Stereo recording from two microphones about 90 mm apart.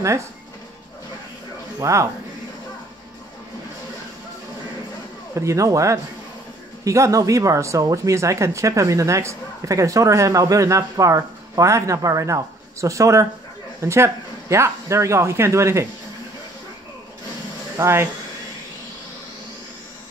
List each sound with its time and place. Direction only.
1.8 s speech: 35° right (ahead or behind)
5.3 s speech: 35° right (ahead or behind)
17.7 s speech: 30° right (ahead or behind)